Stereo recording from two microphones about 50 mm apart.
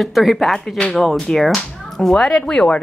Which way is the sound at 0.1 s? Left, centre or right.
Centre.